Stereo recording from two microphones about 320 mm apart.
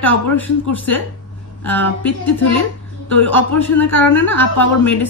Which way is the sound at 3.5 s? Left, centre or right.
Left.